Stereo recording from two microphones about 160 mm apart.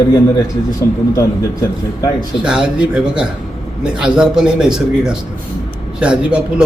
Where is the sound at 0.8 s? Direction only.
20° left (ahead or behind).